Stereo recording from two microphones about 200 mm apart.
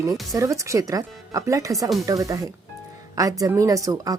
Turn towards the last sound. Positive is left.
turn(degrees=-20)  # may be behind; listen again after turning